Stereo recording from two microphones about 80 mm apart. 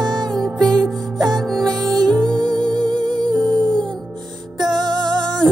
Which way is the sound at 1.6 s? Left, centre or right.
Centre.